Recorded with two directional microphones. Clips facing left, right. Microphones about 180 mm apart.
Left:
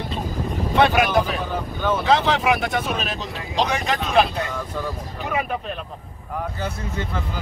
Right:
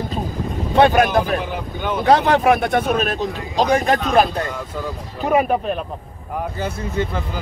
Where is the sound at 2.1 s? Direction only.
55° right (ahead or behind).